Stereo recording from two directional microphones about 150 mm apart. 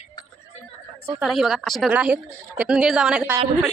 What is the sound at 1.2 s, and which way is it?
A woman's voice, centre (ahead or behind).